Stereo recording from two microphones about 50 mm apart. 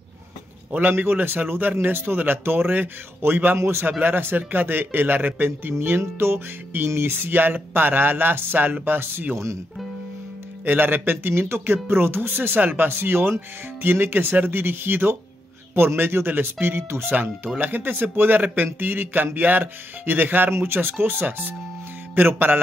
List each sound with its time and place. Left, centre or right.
0.7 s a man's voice: right
10.6 s a man's voice: right
20.5 s a man's voice: right